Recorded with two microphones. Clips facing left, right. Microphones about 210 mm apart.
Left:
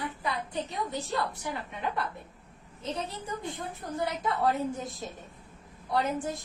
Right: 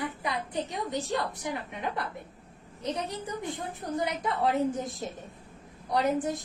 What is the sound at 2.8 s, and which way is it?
A woman's voice, 15° right (ahead or behind).